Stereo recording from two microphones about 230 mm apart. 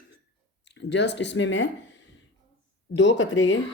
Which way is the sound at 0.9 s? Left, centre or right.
Left.